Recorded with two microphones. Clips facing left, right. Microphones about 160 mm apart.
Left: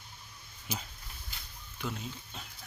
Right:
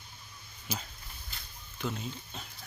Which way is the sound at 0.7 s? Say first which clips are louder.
Right 1 dB; 20° left (ahead or behind).